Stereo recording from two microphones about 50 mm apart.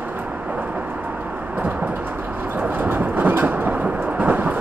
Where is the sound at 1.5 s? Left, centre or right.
Right.